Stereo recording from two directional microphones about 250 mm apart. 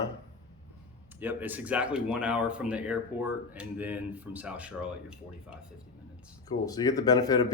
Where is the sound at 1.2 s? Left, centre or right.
Centre.